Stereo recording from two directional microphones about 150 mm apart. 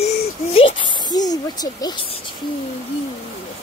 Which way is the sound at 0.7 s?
30° left (ahead or behind).